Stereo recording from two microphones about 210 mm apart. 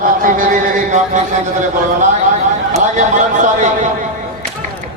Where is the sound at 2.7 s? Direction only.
35° right (ahead or behind).